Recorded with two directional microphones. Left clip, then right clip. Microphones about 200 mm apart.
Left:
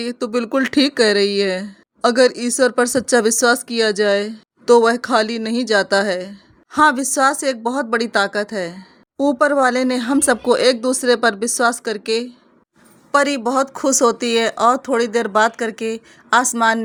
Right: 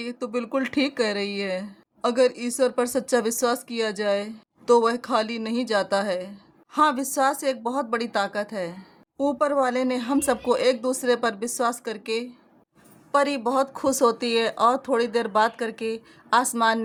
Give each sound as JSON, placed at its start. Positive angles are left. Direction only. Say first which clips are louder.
{"t": 0.0, "sound": "a woman's voice", "louder": "left 8 dB", "side_deg": 20}